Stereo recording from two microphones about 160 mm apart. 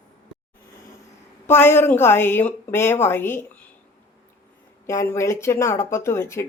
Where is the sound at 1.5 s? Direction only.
15° left (ahead or behind).